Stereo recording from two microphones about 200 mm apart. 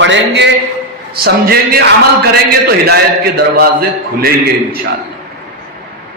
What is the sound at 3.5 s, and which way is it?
Speech, 50° right (ahead or behind).